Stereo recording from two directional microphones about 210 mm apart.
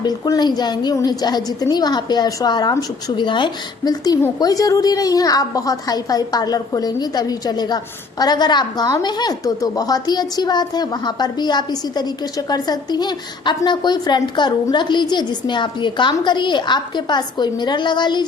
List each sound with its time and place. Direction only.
0.0 s a woman's voice: 20° left (ahead or behind)